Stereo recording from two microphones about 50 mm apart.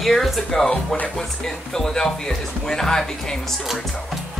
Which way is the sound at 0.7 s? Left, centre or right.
Left.